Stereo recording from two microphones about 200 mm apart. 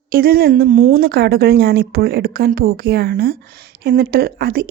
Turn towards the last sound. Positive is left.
turn(degrees=-50)  # may be behind; listen again after turning